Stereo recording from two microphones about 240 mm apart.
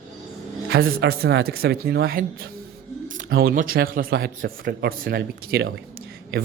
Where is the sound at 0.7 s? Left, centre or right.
Right.